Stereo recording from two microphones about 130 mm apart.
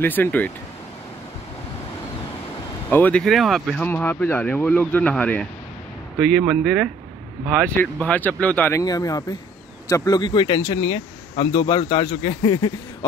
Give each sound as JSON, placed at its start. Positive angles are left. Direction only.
{"t": 0.0, "sound": "speech", "side_deg": 15}
{"t": 2.9, "sound": "speech", "side_deg": 10}
{"t": 3.8, "sound": "speech", "side_deg": 15}
{"t": 8.8, "sound": "speech", "side_deg": 30}